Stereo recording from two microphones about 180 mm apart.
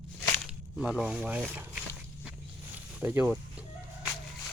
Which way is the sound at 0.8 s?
5° right (ahead or behind).